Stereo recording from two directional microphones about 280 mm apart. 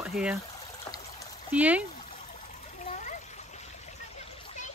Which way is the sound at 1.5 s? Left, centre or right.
Centre.